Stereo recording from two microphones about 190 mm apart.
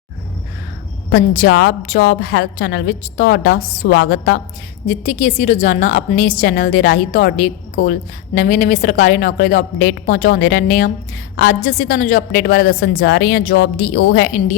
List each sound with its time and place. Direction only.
1.1 s a woman's voice: 55° left (ahead or behind)
4.9 s a woman's voice: 40° left (ahead or behind)